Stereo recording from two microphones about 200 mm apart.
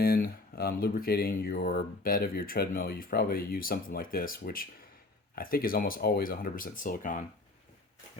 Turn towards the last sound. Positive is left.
turn(degrees=40)  # may be behind; listen again after turning